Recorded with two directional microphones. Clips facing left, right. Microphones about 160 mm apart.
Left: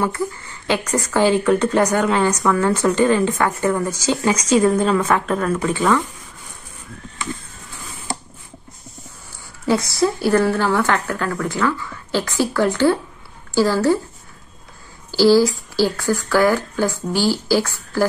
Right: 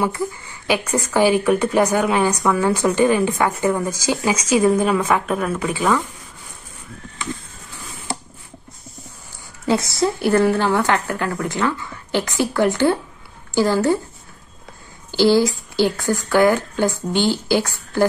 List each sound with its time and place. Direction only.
0.0 s speech: 15° right (ahead or behind)
9.7 s a woman's voice: 20° right (ahead or behind)
15.0 s a woman's voice: 20° right (ahead or behind)